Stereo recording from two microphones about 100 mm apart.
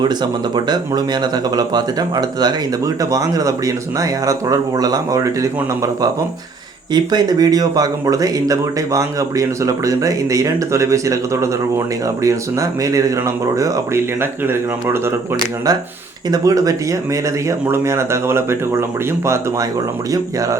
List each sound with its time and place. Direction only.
0.0 s speech: 45° right (ahead or behind)
6.9 s speech: 45° right (ahead or behind); by 15.4 s 25° right (ahead or behind)
16.3 s speech: 35° right (ahead or behind)